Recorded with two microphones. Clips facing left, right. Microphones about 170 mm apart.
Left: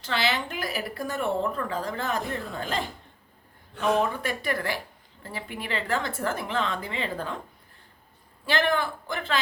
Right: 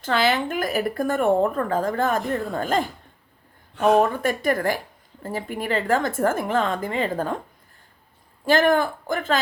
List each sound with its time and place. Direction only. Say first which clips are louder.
0.0 s speech: right 6 dB; 50° right (ahead or behind)
8.4 s speech: right 7 dB; 45° right (ahead or behind)